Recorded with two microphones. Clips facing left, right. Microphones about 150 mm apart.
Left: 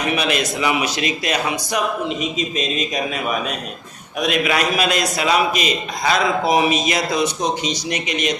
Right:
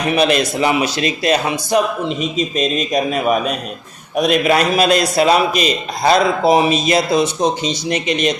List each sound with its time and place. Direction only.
0.2 s a man's voice: 35° right (ahead or behind)